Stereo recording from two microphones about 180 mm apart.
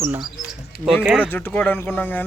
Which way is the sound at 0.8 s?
Centre (ahead or behind).